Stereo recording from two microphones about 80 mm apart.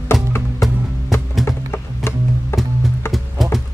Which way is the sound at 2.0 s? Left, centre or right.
Left.